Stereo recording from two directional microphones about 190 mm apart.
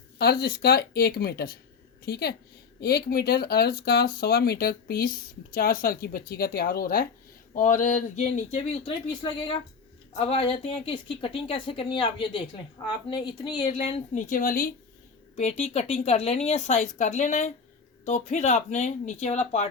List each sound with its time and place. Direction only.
0.2 s speech: 55° left (ahead or behind)
15.4 s speech: 35° left (ahead or behind)